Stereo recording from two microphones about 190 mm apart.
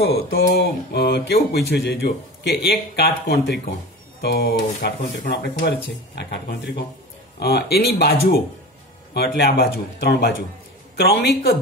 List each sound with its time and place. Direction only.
0.0 s speech: 60° left (ahead or behind)